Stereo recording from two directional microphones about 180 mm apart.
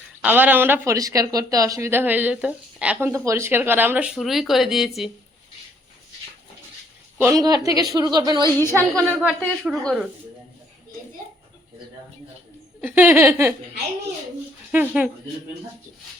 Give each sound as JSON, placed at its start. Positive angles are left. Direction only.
{"t": 0.2, "sound": "speech", "side_deg": -10}
{"t": 7.2, "sound": "a woman's voice", "side_deg": -20}
{"t": 8.4, "sound": "a woman's voice", "side_deg": 15}
{"t": 9.6, "sound": "speech", "side_deg": 0}
{"t": 12.8, "sound": "speech", "side_deg": -10}
{"t": 14.7, "sound": "speech", "side_deg": -10}